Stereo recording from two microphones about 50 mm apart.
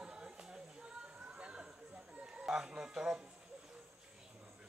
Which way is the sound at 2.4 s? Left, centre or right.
Centre.